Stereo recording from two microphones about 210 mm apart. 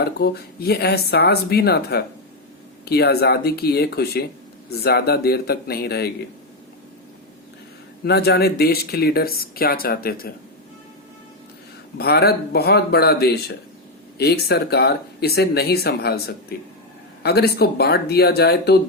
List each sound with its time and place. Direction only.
0.0 s speech: 50° left (ahead or behind)
8.0 s speech: 50° left (ahead or behind)
11.9 s speech: 50° left (ahead or behind)